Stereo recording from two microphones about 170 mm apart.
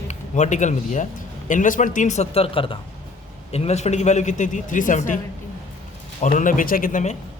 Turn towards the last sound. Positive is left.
turn(degrees=45)  # may be behind; listen again after turning